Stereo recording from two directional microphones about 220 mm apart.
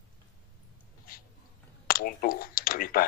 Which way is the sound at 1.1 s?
40° left (ahead or behind).